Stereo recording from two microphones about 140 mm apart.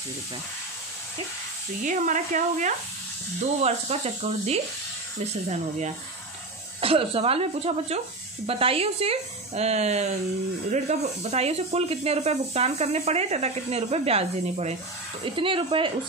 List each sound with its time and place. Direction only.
1.8 s speech: 65° right (ahead or behind)
3.6 s speech: 50° right (ahead or behind)
6.8 s speech: 40° right (ahead or behind)
15.2 s speech: 40° right (ahead or behind)